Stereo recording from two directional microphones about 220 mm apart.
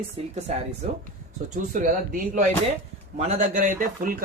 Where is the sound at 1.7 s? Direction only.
35° right (ahead or behind).